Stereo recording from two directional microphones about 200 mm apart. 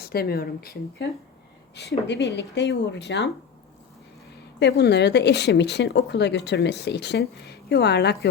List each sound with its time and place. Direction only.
0.0 s speech: 50° left (ahead or behind)
4.6 s speech: 60° left (ahead or behind)